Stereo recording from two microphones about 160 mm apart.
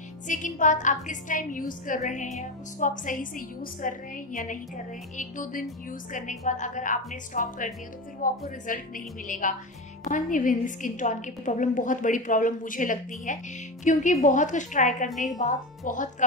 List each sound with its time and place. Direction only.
0.3 s a woman's voice: 50° left (ahead or behind)
15.0 s a woman's voice: centre (ahead or behind)
15.3 s a woman's voice: 50° left (ahead or behind)